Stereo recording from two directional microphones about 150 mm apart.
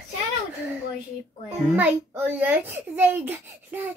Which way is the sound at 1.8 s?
10° right (ahead or behind).